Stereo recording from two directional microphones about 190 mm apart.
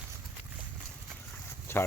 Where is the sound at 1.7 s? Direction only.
15° left (ahead or behind).